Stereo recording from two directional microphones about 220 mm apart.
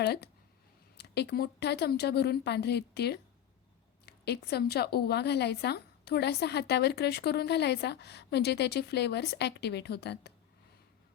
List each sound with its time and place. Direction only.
0.0 s a woman's voice: 50° left (ahead or behind)